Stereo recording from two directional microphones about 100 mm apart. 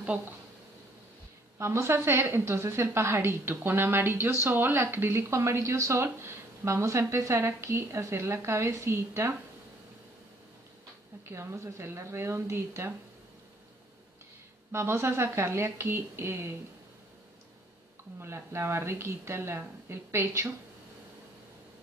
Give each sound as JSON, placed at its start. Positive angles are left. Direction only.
{"t": 1.6, "sound": "a woman's voice", "side_deg": -25}
{"t": 11.2, "sound": "a woman's voice", "side_deg": -25}
{"t": 14.7, "sound": "a woman's voice", "side_deg": -25}
{"t": 18.2, "sound": "a woman's voice", "side_deg": -25}